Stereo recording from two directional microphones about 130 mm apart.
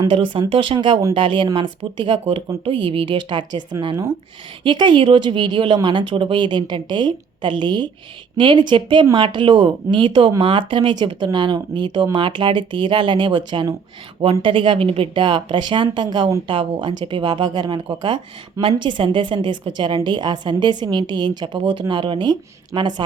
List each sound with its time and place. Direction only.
0.0 s speech: 40° right (ahead or behind)